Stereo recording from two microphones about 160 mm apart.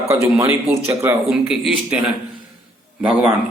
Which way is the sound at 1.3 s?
5° right (ahead or behind).